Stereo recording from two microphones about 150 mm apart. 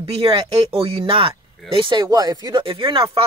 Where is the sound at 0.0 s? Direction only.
35° right (ahead or behind).